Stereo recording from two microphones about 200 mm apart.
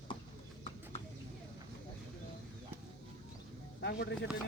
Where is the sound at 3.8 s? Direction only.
60° left (ahead or behind).